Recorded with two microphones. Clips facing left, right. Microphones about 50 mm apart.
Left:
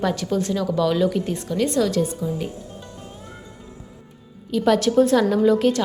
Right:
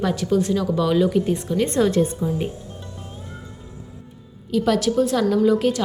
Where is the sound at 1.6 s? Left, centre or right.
Right.